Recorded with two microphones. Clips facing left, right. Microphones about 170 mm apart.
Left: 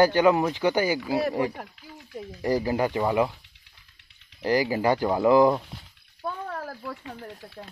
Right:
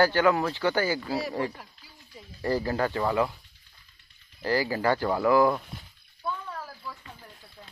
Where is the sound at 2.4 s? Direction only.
15° left (ahead or behind).